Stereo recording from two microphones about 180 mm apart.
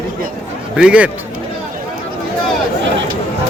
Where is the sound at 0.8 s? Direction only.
5° right (ahead or behind).